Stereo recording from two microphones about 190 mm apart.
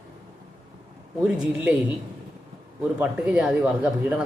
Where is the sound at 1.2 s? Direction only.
5° right (ahead or behind).